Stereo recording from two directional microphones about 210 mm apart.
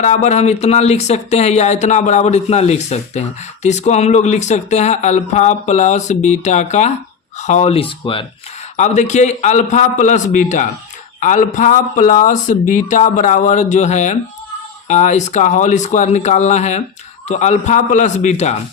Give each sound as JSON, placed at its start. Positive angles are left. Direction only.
{"t": 0.0, "sound": "speech", "side_deg": 35}